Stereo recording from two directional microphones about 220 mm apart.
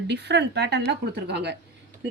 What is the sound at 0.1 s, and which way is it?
Speech, 50° right (ahead or behind).